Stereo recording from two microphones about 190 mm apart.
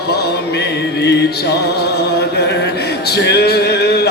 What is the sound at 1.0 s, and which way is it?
Music, 60° left (ahead or behind).